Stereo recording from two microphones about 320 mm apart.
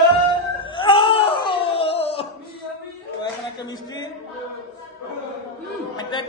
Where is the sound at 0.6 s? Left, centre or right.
Centre.